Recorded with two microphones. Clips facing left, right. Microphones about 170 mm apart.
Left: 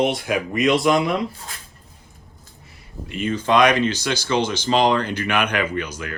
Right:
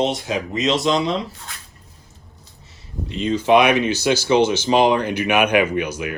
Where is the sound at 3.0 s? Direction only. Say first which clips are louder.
Right 1 dB; 25° right (ahead or behind).